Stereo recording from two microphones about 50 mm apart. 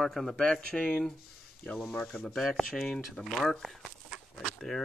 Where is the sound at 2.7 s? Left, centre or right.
Centre.